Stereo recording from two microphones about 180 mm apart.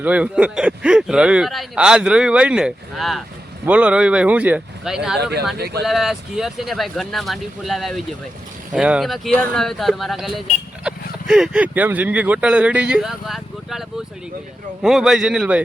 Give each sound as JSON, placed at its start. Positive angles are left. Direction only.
{"t": 0.0, "sound": "speech", "side_deg": -5}
{"t": 5.5, "sound": "speech", "side_deg": -65}
{"t": 5.8, "sound": "speech", "side_deg": 0}